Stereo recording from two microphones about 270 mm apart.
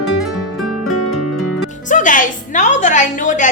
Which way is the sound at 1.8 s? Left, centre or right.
Left.